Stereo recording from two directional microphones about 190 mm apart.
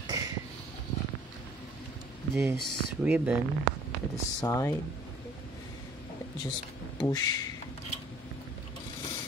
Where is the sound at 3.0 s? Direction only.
5° right (ahead or behind).